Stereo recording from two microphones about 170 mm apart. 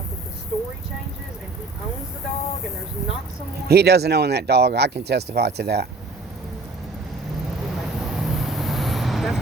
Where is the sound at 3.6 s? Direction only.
75° right (ahead or behind).